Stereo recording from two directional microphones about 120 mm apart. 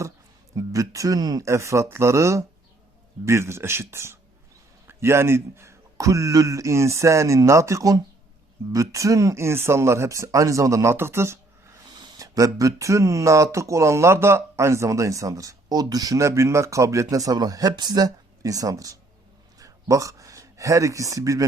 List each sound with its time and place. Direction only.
0.5 s speech: 25° right (ahead or behind)
11.9 s speech: 35° right (ahead or behind)